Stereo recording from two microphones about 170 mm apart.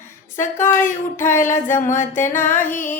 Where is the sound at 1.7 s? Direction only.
45° left (ahead or behind).